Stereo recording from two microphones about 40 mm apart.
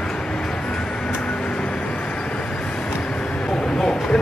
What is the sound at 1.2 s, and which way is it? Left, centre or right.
Vehicle, left.